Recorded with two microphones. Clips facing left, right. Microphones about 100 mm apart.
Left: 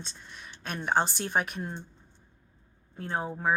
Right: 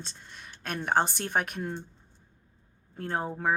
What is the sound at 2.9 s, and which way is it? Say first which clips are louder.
Speech: right 1 dB; 55° right (ahead or behind).